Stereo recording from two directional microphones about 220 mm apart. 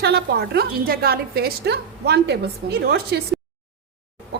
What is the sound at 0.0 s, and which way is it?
A woman's voice, 45° right (ahead or behind).